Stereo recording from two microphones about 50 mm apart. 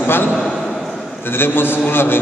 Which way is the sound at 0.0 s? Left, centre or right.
Left.